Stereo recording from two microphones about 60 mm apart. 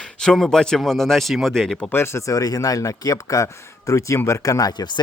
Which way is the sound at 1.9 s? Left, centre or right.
Left.